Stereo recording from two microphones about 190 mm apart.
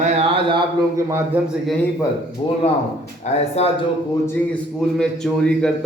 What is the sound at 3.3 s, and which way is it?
Speech, 35° left (ahead or behind).